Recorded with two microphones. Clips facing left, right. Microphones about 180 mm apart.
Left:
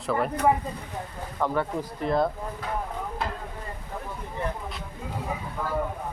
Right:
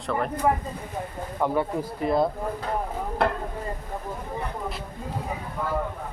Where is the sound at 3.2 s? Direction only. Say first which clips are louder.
Right 10 dB; 65° right (ahead or behind).